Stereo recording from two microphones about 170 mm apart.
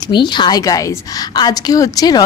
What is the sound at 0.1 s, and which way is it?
A woman's voice, 25° left (ahead or behind).